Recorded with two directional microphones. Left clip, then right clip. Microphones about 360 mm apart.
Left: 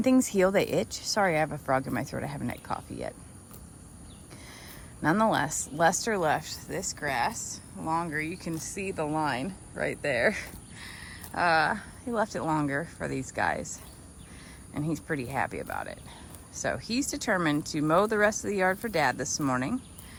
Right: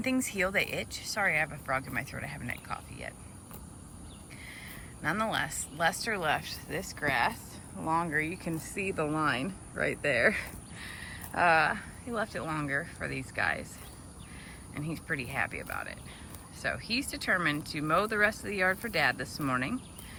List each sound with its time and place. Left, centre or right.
0.3 s speech: centre
0.6 s speech: left
1.1 s speech: centre
5.0 s speech: centre
14.8 s speech: centre